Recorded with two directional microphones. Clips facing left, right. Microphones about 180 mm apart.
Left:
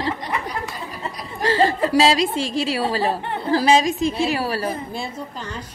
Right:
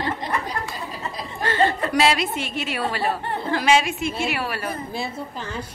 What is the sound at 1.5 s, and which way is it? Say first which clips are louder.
Chuckle: left 3 dB; 30° left (ahead or behind).